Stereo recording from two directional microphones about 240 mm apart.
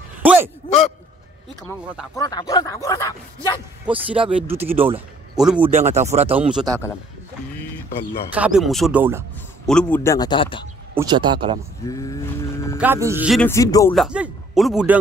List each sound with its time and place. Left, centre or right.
0.2 s a sound: centre
2.1 s speech: centre
3.8 s a man's voice: centre
5.7 s speech: right
6.3 s speech: centre
8.4 s speech: centre
9.7 s speech: centre; by 10.6 s left
11.0 s speech: centre
11.8 s livestock: centre
12.7 s speech: centre
13.5 s speech: centre
13.9 s speech: centre